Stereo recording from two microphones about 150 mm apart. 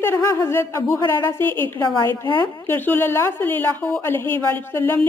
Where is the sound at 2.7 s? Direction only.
15° left (ahead or behind).